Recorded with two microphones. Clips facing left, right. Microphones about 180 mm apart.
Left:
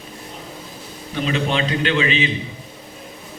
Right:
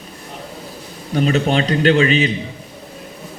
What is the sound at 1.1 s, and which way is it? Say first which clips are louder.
A man's voice: right 5 dB; 45° right (ahead or behind).